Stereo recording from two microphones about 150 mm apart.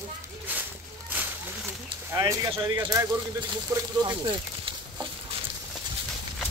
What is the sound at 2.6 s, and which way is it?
Speech, 25° right (ahead or behind).